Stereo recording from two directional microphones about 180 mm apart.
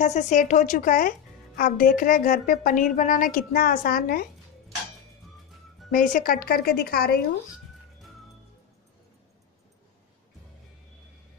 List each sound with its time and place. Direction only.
0.0 s a woman's voice: 45° left (ahead or behind)
5.9 s a woman's voice: 50° left (ahead or behind)